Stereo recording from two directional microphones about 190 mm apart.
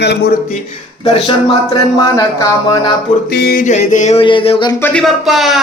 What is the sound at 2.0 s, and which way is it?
Speech, 20° left (ahead or behind).